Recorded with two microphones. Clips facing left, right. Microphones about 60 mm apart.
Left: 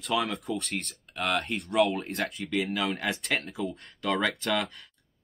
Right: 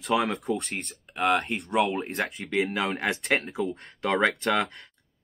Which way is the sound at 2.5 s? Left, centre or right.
Right.